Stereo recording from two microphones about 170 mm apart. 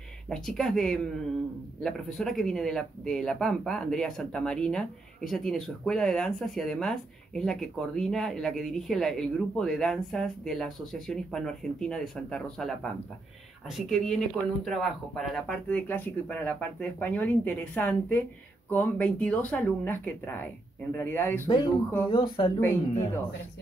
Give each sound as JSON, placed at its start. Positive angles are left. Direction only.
{"t": 0.3, "sound": "speech", "side_deg": 0}
{"t": 21.5, "sound": "speech", "side_deg": 25}
{"t": 22.6, "sound": "speech", "side_deg": 15}